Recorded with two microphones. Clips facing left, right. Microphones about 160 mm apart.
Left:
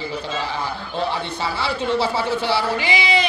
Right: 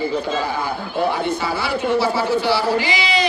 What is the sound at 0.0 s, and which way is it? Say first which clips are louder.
Speech: right 5 dB; 50° right (ahead or behind).